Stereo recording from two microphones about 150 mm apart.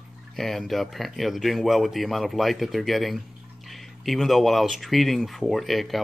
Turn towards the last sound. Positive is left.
turn(degrees=0)  # may be behind; listen again after turning